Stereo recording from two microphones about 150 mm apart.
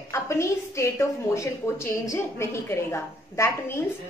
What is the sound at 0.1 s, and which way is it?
A woman's voice, 20° left (ahead or behind).